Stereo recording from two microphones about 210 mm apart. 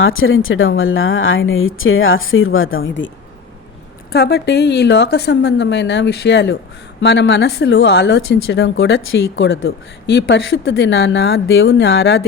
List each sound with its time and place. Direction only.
0.0 s speech: 75° left (ahead or behind)
4.1 s speech: 50° left (ahead or behind)